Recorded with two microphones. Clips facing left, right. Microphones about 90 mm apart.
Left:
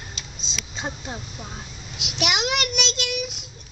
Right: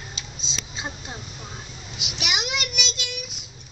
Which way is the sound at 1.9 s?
60° left (ahead or behind).